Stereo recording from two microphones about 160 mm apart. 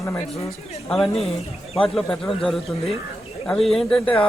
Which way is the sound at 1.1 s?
40° left (ahead or behind).